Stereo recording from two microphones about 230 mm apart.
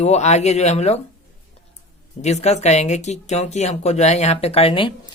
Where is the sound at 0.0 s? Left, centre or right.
Left.